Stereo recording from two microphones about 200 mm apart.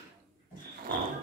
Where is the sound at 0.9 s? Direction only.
45° right (ahead or behind).